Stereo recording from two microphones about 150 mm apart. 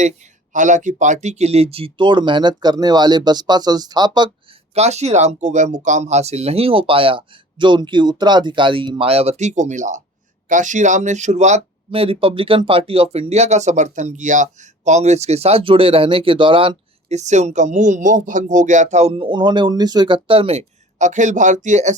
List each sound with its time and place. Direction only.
0.5 s speech: 55° right (ahead or behind); by 4.3 s 30° right (ahead or behind)
4.7 s speech: 45° right (ahead or behind)